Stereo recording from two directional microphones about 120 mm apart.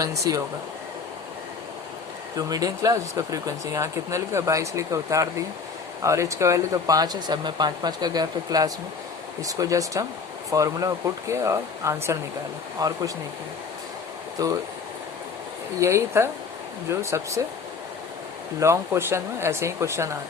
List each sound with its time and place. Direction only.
0.0 s speech: 30° right (ahead or behind)
2.3 s speech: 30° right (ahead or behind)
14.4 s speech: 30° right (ahead or behind)
15.8 s speech: 25° right (ahead or behind)
18.6 s speech: 20° right (ahead or behind)